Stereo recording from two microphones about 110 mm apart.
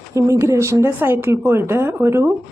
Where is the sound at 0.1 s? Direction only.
25° right (ahead or behind).